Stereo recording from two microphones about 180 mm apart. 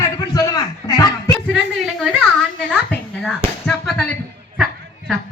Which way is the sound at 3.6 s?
5° left (ahead or behind).